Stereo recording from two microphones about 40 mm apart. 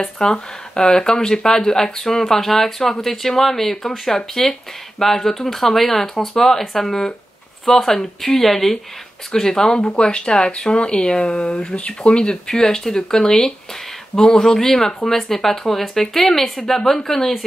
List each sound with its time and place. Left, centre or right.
0.0 s speech: centre
9.8 s speech: left